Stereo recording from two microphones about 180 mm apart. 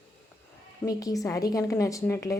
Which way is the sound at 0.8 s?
20° left (ahead or behind).